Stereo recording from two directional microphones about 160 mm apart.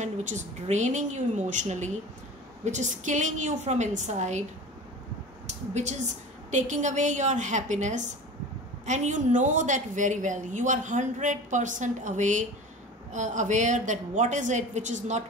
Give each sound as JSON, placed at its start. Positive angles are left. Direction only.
{"t": 0.0, "sound": "a woman's voice", "side_deg": -50}
{"t": 6.5, "sound": "a woman's voice", "side_deg": -50}